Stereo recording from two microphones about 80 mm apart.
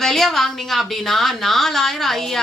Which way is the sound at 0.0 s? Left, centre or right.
Centre.